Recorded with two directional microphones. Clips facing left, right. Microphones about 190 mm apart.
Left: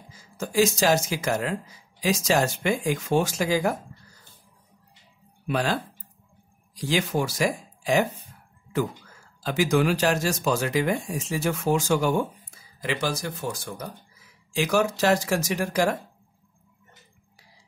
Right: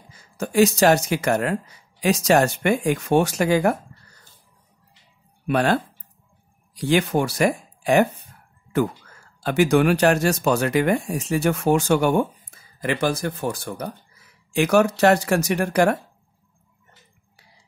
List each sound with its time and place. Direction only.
0.1 s speech: 65° right (ahead or behind)
5.5 s speech: 60° right (ahead or behind)
9.4 s speech: 60° right (ahead or behind)